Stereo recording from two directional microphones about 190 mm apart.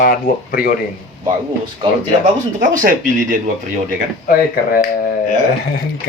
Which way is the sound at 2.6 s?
45° right (ahead or behind).